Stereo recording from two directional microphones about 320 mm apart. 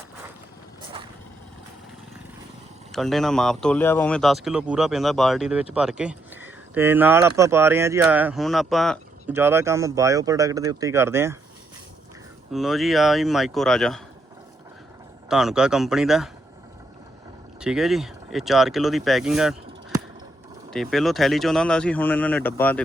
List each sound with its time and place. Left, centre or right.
2.9 s speech: centre
12.5 s speech: centre
15.3 s speech: centre
17.6 s speech: centre
20.7 s speech: centre